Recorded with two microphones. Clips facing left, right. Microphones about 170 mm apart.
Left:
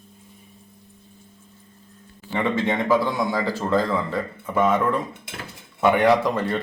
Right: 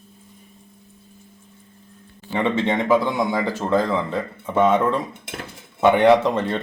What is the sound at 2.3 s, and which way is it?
A man's voice, 20° right (ahead or behind).